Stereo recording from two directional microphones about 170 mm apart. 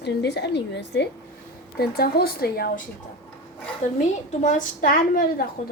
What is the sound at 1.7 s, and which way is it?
Speech, 65° left (ahead or behind).